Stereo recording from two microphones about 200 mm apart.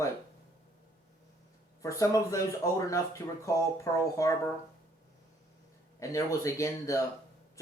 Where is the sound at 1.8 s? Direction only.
15° left (ahead or behind).